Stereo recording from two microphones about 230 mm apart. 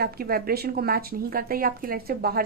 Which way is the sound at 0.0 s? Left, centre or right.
Right.